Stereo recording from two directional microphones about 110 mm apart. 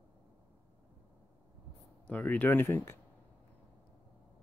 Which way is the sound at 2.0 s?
15° left (ahead or behind).